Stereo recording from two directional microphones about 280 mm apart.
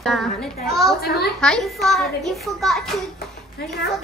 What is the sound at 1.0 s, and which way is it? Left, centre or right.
Speech, left.